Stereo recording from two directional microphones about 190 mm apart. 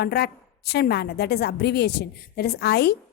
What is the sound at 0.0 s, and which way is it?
A woman's voice, 60° left (ahead or behind).